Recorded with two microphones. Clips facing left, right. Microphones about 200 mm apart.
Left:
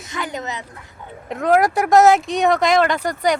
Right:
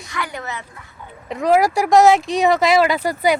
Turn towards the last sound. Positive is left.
turn(degrees=-5)  # may be behind; listen again after turning